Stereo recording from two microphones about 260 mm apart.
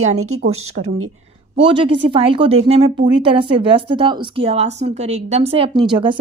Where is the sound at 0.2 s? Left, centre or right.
Right.